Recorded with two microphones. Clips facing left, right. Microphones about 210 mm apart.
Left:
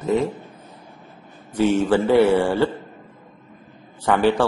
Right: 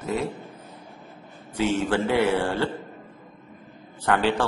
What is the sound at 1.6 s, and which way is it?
A man's voice, 10° left (ahead or behind).